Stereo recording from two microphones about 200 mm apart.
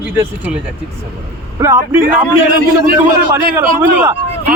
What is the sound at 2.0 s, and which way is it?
Speech, 45° right (ahead or behind).